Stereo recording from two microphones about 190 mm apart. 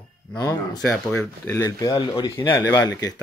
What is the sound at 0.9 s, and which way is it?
Speech, centre (ahead or behind).